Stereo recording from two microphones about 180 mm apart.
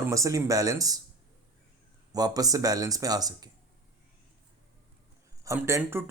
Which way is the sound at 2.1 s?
20° right (ahead or behind).